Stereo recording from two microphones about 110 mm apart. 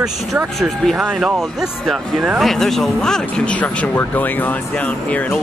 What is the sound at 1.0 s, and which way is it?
Speech, 10° right (ahead or behind).